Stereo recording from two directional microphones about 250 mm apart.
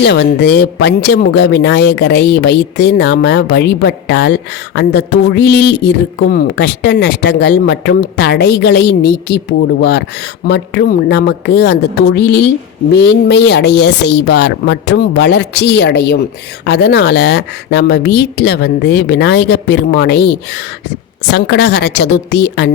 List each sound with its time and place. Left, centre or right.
0.0 s speech: left